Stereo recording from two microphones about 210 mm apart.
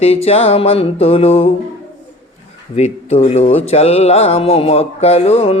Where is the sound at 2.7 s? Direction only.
30° left (ahead or behind).